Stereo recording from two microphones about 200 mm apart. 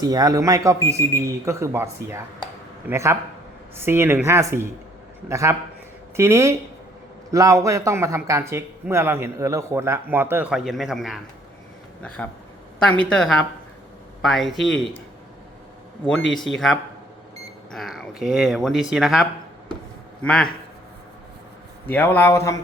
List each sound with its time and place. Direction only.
0.0 s speech: 20° right (ahead or behind); by 14.8 s centre (ahead or behind)
17.7 s speech: centre (ahead or behind)
21.8 s speech: 10° left (ahead or behind)